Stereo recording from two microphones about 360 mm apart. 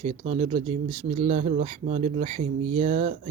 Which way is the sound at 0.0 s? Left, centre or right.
Centre.